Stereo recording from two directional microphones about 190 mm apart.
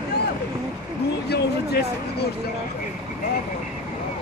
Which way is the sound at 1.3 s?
60° left (ahead or behind).